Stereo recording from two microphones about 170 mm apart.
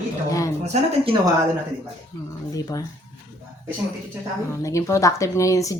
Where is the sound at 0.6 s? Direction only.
40° right (ahead or behind).